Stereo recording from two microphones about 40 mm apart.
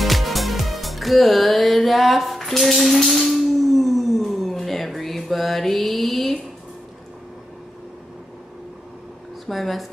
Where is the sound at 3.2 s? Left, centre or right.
Centre.